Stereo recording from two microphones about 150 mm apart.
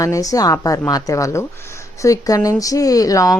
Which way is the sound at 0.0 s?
20° left (ahead or behind).